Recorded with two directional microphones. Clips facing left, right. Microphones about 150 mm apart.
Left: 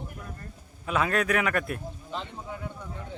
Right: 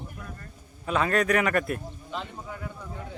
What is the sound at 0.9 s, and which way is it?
A man's voice, 5° left (ahead or behind).